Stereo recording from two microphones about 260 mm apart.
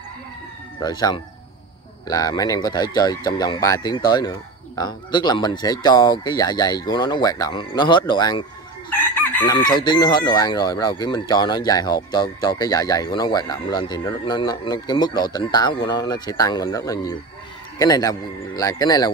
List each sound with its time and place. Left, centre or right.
0.7 s speech: centre
8.9 s chicken: centre
9.7 s speech: centre